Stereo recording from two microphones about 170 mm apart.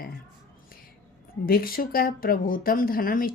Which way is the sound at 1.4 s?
60° left (ahead or behind).